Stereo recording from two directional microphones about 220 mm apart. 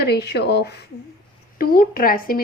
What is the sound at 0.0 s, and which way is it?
A woman's voice, 45° left (ahead or behind).